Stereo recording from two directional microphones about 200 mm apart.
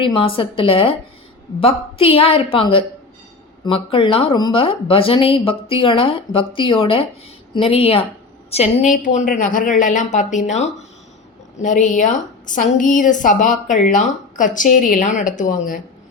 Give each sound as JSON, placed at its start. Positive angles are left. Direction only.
{"t": 0.0, "sound": "a woman's voice", "side_deg": 25}